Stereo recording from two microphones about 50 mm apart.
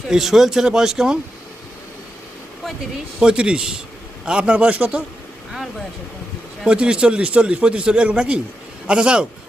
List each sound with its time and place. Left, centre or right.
0.1 s speech: centre
2.9 s a man's voice: centre
6.7 s a man's voice: right